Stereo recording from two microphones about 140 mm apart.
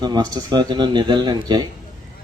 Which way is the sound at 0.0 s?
30° right (ahead or behind).